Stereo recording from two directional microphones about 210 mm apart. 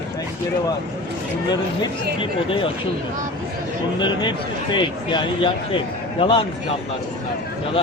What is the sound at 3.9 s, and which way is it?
Speech, 20° left (ahead or behind).